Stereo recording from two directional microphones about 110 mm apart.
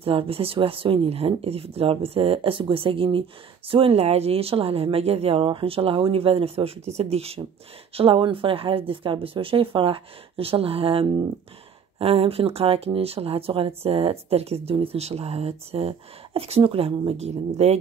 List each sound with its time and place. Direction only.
0.0 s speech: 55° right (ahead or behind)
7.9 s speech: 55° right (ahead or behind); by 17.7 s 75° right (ahead or behind)